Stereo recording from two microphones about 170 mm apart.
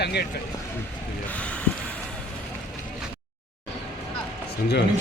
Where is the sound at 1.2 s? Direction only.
5° left (ahead or behind).